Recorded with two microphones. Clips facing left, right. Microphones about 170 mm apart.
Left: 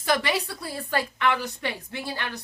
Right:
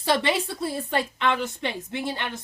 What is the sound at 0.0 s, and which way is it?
A woman's voice, 25° right (ahead or behind).